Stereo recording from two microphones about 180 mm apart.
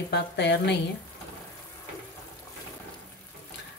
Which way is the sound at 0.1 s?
75° left (ahead or behind).